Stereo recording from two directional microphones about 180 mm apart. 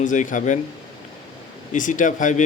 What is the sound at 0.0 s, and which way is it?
Speech, 45° left (ahead or behind).